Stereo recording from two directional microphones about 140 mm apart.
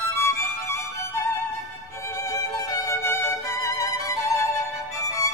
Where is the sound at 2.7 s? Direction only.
20° left (ahead or behind).